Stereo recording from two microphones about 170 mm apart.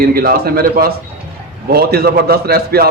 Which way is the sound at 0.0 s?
60° right (ahead or behind).